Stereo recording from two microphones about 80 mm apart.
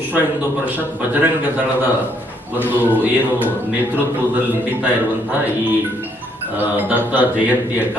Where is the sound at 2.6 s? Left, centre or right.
Left.